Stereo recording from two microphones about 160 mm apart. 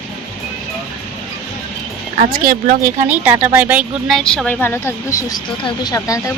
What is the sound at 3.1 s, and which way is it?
Speech, 10° right (ahead or behind).